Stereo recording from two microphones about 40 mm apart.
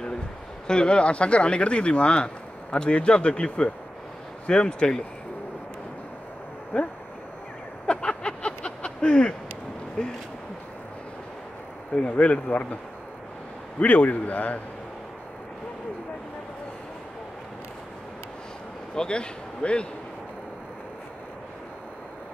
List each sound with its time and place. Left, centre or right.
0.7 s speech: left
6.7 s a man's voice: left
7.8 s a sound: left
12.1 s a man's voice: left
13.7 s a man's voice: left
18.9 s a man's voice: left